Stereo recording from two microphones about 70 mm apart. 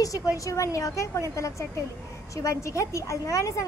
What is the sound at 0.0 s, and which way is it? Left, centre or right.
A woman's voice, left.